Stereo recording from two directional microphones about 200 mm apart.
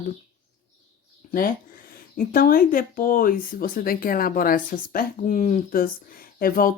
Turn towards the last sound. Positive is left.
turn(degrees=45)  # may be behind; listen again after turning